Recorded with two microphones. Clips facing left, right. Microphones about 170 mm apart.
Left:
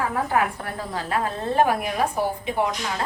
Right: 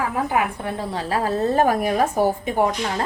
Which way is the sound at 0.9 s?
30° right (ahead or behind).